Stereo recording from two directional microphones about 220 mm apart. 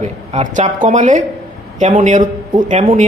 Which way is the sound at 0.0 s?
30° right (ahead or behind).